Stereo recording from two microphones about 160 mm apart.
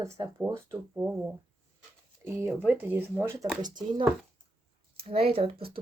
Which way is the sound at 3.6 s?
25° right (ahead or behind).